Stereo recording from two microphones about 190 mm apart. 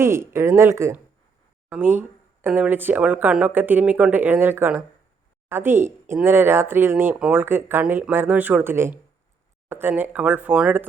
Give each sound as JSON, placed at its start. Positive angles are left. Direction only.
{"t": 0.0, "sound": "speech", "side_deg": -15}